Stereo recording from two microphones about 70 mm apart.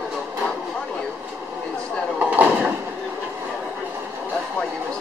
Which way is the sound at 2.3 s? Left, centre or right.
Right.